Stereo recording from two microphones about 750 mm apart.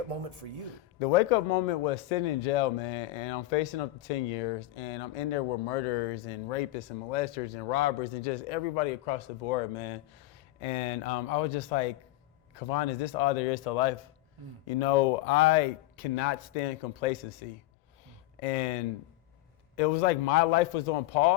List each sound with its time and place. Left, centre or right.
0.1 s speech: right
0.9 s speech: left